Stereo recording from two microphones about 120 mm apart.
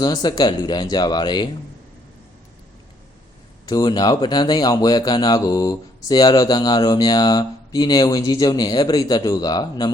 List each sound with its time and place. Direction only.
0.0 s speech: 35° left (ahead or behind)
3.7 s speech: 35° left (ahead or behind)